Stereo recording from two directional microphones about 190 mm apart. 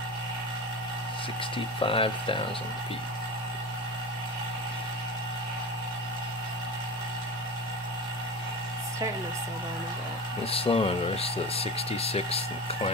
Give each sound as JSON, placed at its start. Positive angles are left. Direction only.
{"t": 1.8, "sound": "speech", "side_deg": 30}
{"t": 10.4, "sound": "speech", "side_deg": 30}